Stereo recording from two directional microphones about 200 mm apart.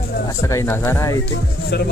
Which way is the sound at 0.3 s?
15° left (ahead or behind).